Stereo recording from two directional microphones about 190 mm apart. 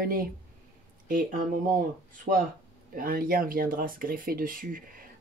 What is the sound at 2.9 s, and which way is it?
Speech, 50° right (ahead or behind).